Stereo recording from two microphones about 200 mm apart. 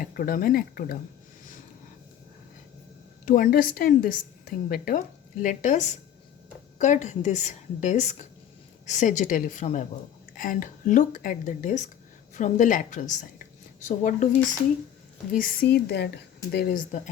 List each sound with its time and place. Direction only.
0.0 s a woman's voice: 45° left (ahead or behind)
3.2 s a woman's voice: 45° left (ahead or behind)
15.3 s a woman's voice: 50° left (ahead or behind)